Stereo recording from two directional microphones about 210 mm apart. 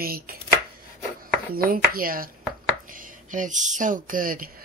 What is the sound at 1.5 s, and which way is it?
Speech, 45° right (ahead or behind).